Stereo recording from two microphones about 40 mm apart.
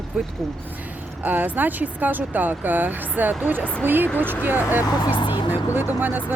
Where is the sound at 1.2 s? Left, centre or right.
Right.